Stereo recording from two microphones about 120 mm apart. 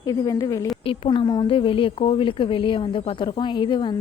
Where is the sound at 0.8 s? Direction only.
45° left (ahead or behind).